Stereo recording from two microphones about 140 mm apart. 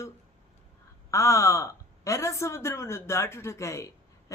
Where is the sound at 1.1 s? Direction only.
20° left (ahead or behind).